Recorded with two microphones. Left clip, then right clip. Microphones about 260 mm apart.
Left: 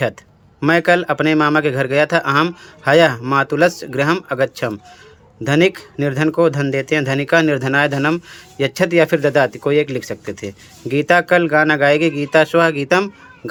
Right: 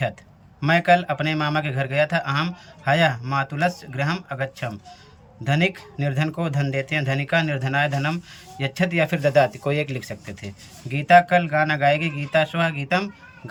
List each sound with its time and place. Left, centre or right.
0.6 s speech: centre